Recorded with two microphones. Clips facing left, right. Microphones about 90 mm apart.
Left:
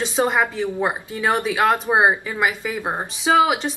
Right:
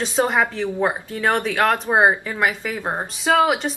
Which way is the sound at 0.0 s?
Centre (ahead or behind).